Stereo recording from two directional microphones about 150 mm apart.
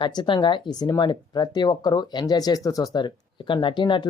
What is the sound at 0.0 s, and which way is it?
Speech, 30° left (ahead or behind).